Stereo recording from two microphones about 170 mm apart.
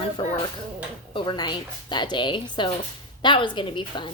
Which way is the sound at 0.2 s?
30° left (ahead or behind).